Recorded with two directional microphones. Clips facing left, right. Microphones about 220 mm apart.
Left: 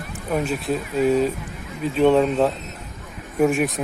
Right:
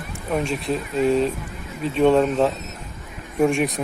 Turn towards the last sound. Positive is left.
turn(degrees=0)  # may be behind; listen again after turning